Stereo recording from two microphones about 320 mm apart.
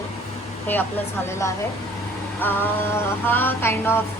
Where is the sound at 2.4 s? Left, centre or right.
Centre.